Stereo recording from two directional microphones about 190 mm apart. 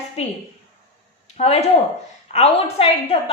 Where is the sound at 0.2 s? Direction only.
35° left (ahead or behind).